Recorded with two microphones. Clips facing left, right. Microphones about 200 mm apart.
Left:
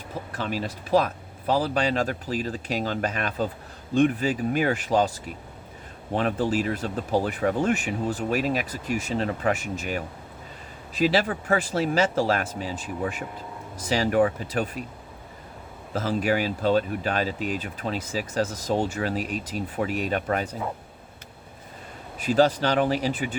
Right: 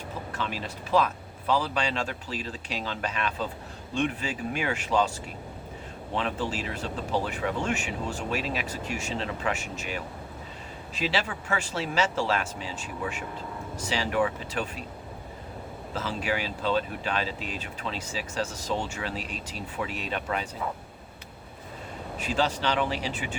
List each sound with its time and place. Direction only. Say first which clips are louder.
0.3 s speech: left 5 dB; 45° left (ahead or behind)
6.1 s speech: left 6 dB; 45° left (ahead or behind)
11.0 s speech: left 7 dB; 40° left (ahead or behind)
15.9 s speech: left 6 dB; 45° left (ahead or behind)
22.2 s speech: left 7 dB; 40° left (ahead or behind)